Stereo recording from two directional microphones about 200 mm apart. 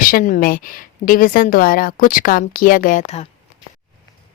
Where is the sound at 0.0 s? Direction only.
45° left (ahead or behind).